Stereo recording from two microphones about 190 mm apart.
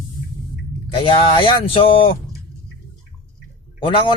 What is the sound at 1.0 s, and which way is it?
A man's voice, 25° left (ahead or behind).